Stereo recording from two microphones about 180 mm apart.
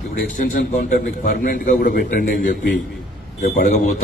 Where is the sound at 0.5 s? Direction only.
45° left (ahead or behind).